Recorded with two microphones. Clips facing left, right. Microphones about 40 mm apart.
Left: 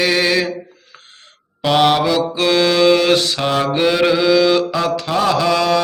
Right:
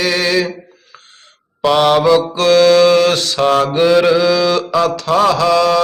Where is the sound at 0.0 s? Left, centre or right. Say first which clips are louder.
Even; centre.